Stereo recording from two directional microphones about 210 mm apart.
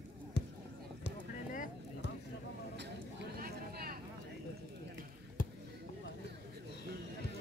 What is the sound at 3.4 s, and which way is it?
Vehicle, 45° right (ahead or behind).